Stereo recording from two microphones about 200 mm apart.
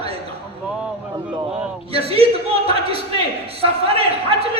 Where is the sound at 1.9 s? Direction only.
30° right (ahead or behind).